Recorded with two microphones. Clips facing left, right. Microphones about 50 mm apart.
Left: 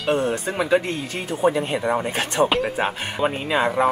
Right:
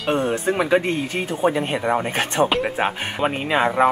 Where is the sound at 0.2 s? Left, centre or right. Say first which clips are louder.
Right 2 dB; right.